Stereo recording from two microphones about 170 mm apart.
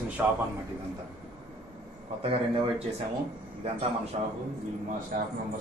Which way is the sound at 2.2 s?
35° right (ahead or behind).